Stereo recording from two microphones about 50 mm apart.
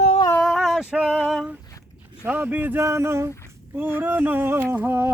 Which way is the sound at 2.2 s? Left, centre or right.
Right.